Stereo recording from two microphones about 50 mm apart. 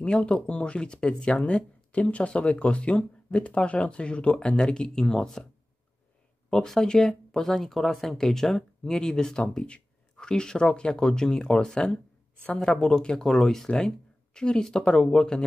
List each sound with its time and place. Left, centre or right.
0.0 s speech: centre
1.9 s speech: left
6.5 s speech: centre